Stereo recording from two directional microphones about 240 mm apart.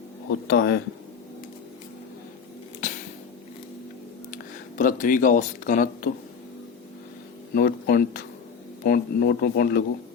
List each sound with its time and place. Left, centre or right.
0.3 s speech: left
2.8 s a sound: left
4.8 s speech: left
7.5 s speech: left